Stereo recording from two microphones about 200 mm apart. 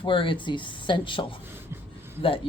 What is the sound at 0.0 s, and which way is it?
Speech, 25° left (ahead or behind).